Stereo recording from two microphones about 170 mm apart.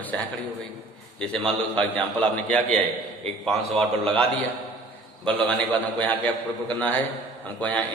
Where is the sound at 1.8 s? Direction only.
5° left (ahead or behind).